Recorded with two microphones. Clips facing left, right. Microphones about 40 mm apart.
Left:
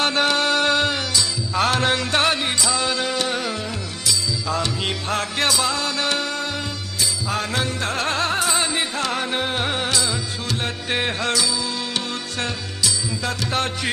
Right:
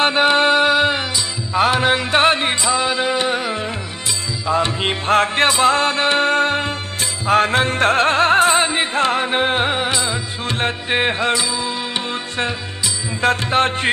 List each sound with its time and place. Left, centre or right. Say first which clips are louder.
0.0 s music: right 5 dB; right
13.5 s music: right 7 dB; right